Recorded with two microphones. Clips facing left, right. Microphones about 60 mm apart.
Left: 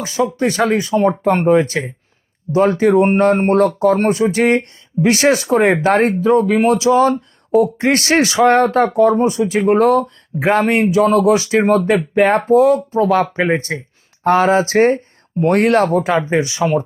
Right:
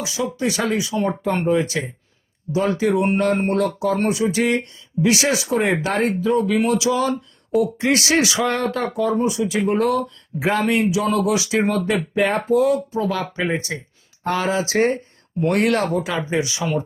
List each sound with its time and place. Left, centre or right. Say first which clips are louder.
0.0 s speech: left 6 dB; left